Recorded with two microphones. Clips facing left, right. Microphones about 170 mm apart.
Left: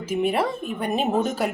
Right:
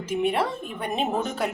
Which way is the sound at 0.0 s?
5° left (ahead or behind).